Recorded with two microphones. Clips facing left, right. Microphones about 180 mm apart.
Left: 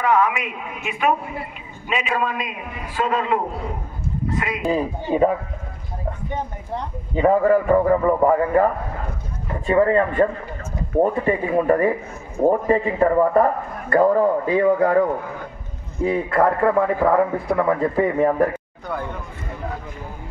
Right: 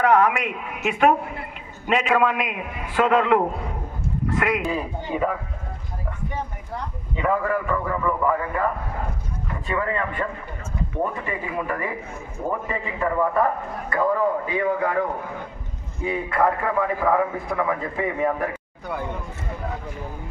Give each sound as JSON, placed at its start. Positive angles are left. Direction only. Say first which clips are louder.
{"t": 0.0, "sound": "a man's voice", "louder": "right 1 dB", "side_deg": -65}
{"t": 7.2, "sound": "a man's voice", "louder": "left 7 dB", "side_deg": 35}
{"t": 9.7, "sound": "a man's voice", "louder": "left 9 dB", "side_deg": 40}